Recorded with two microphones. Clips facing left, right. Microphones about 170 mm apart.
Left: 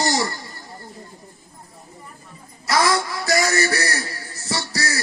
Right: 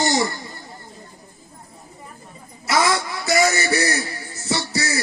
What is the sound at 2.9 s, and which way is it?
Speech, 20° right (ahead or behind).